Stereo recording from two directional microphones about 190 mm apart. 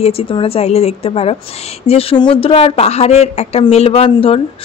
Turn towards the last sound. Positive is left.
turn(degrees=30)  # may be behind; listen again after turning